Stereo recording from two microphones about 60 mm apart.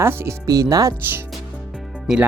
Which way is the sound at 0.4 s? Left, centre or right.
Right.